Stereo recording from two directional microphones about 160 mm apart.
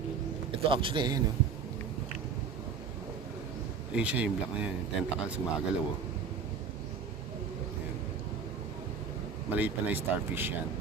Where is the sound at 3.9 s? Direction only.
10° right (ahead or behind).